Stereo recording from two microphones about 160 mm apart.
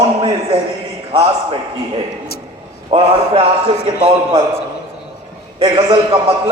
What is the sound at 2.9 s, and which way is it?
A man's voice, 35° right (ahead or behind).